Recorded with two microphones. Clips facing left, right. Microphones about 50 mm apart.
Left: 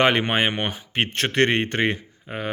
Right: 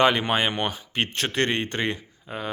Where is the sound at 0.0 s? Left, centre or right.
Left.